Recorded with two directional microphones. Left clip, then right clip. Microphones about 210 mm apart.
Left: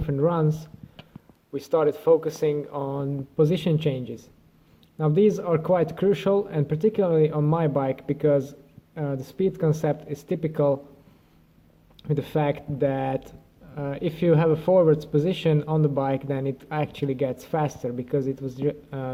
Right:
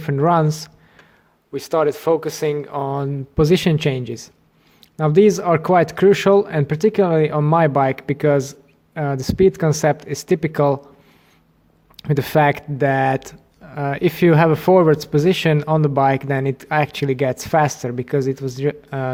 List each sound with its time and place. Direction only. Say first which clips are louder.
0.0 s speech: right 7 dB; 45° right (ahead or behind)
11.9 s speech: right 9 dB; 45° right (ahead or behind)